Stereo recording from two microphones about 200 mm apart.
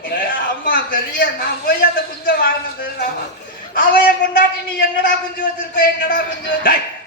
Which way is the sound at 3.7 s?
45° left (ahead or behind).